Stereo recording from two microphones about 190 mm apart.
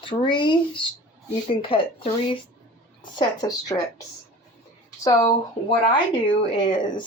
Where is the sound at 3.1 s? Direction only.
20° left (ahead or behind).